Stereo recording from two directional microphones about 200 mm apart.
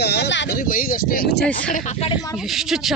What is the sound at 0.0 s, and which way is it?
Speech, 55° left (ahead or behind).